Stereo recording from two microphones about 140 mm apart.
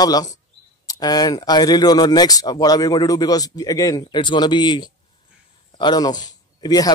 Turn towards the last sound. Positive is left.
turn(degrees=30)  # may be behind; listen again after turning